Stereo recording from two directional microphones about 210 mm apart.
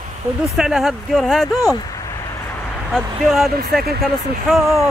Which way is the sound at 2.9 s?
Centre (ahead or behind).